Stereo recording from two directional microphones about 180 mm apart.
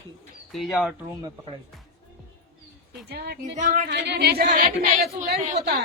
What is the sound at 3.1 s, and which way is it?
Speech, 65° right (ahead or behind).